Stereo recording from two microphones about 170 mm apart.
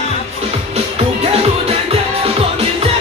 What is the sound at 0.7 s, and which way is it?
Music, 35° right (ahead or behind).